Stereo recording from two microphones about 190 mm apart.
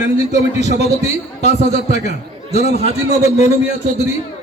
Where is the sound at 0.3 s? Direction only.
35° left (ahead or behind).